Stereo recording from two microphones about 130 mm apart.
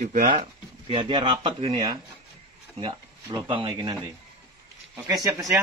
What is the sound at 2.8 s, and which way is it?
Speech, 30° right (ahead or behind).